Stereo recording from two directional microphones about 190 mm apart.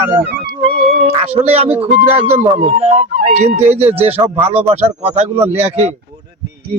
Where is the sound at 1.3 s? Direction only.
30° right (ahead or behind).